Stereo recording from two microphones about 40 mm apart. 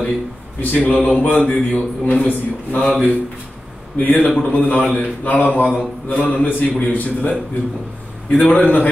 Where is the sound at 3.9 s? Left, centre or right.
Left.